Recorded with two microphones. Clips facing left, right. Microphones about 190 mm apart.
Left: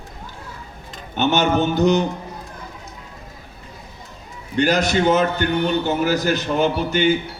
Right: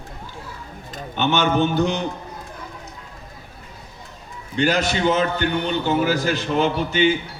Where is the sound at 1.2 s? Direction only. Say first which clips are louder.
Left 1 dB; 45° left (ahead or behind).